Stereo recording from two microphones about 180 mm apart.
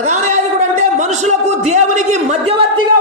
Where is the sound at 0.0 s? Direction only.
40° right (ahead or behind).